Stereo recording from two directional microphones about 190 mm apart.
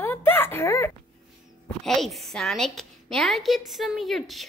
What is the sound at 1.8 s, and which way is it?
A woman's voice, centre (ahead or behind).